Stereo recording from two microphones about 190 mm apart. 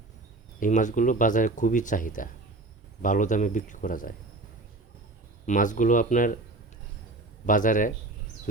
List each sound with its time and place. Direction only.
0.6 s speech: 40° left (ahead or behind)
5.5 s speech: 45° left (ahead or behind)
7.4 s speech: 45° left (ahead or behind)